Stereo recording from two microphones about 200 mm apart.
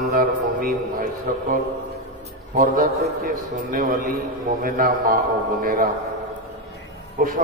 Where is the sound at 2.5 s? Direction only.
45° right (ahead or behind).